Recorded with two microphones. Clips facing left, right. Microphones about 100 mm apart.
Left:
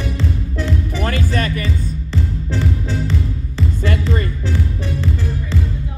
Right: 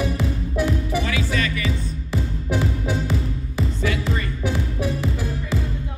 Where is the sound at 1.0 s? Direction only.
50° left (ahead or behind).